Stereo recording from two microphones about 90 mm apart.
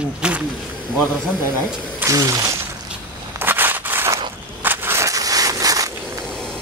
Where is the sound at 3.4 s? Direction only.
25° right (ahead or behind); by 5.9 s 40° right (ahead or behind).